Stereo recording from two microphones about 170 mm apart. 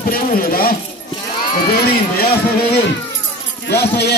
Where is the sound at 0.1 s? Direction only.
60° left (ahead or behind).